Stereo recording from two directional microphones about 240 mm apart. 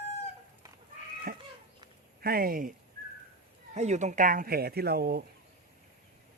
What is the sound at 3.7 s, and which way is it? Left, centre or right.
Speech, right.